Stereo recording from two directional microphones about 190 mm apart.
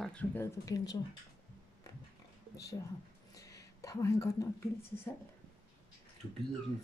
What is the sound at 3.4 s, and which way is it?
Speech, 20° left (ahead or behind).